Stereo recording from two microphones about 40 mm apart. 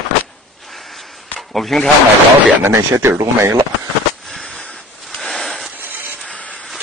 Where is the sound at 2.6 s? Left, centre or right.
Right.